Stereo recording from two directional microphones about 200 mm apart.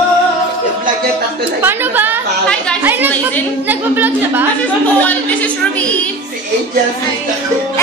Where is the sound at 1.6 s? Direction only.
10° right (ahead or behind).